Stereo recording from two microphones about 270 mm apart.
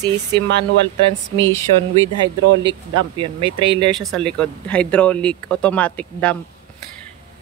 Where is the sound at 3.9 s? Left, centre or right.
Centre.